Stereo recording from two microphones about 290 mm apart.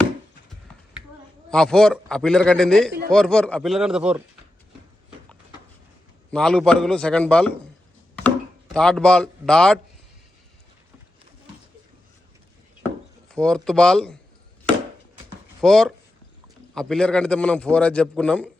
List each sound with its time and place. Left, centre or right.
1.5 s a man's voice: centre
6.3 s a man's voice: centre
8.7 s a man's voice: centre
13.2 s a man's voice: centre
15.6 s a man's voice: centre